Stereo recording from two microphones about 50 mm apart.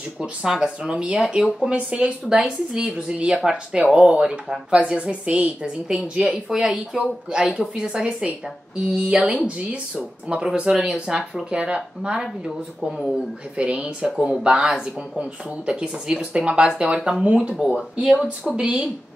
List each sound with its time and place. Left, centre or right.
0.2 s speech: centre
2.2 s speech: centre
12.4 s speech: centre
13.6 s speech: right